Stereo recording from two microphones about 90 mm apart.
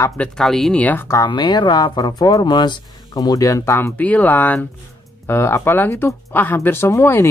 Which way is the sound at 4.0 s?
15° left (ahead or behind).